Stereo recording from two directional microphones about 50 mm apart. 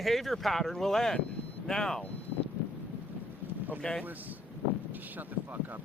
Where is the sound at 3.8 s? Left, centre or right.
Centre.